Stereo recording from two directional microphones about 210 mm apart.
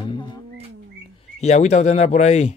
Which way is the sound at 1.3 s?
30° left (ahead or behind).